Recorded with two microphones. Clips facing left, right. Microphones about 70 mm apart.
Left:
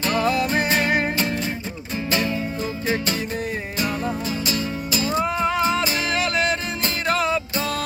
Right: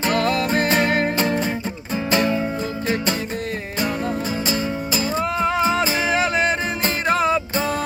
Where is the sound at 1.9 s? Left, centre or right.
Right.